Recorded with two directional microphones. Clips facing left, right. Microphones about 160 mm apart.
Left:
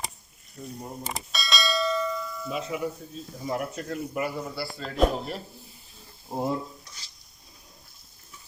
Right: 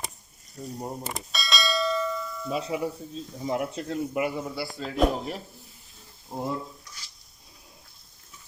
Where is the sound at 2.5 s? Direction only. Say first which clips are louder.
Right 2 dB; 35° right (ahead or behind).